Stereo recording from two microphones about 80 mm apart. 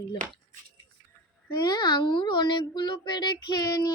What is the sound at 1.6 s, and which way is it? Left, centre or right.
A child's voice, left.